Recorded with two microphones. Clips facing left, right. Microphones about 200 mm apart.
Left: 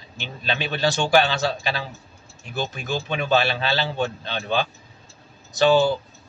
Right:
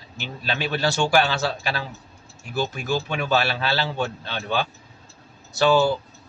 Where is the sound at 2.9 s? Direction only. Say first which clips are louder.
Left 2 dB; 20° left (ahead or behind).